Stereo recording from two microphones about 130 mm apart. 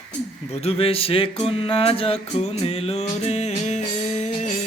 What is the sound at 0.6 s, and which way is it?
Music, 50° left (ahead or behind).